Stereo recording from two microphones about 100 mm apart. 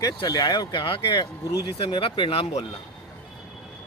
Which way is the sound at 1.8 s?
60° left (ahead or behind).